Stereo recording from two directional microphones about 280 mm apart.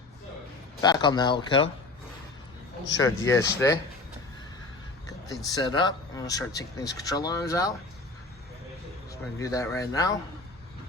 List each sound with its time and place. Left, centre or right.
0.8 s speech: centre
2.8 s speech: centre
5.5 s speech: centre
9.4 s speech: centre